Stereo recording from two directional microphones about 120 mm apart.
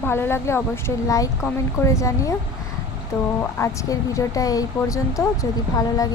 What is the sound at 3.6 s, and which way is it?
Speech, 25° left (ahead or behind).